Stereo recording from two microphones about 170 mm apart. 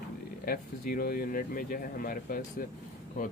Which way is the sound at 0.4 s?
60° left (ahead or behind).